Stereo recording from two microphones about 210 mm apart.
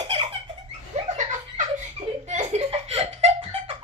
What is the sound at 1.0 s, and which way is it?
Laughter, 35° right (ahead or behind).